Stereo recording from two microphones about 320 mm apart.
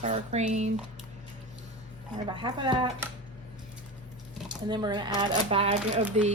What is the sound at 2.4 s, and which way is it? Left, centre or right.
Speech, centre.